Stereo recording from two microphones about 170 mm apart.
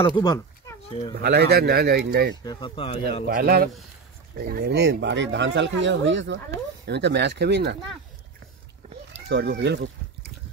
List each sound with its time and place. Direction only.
0.0 s speech: 25° left (ahead or behind)
0.8 s speech: 35° left (ahead or behind)
1.2 s speech: 70° right (ahead or behind)
2.4 s speech: 25° left (ahead or behind)
3.3 s a man's voice: 60° right (ahead or behind)
5.0 s speech: 90° right
9.1 s speech: 85° right